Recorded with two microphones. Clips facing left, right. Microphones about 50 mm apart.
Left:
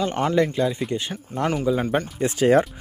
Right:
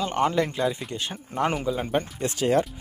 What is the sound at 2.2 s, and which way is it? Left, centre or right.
Speech, centre.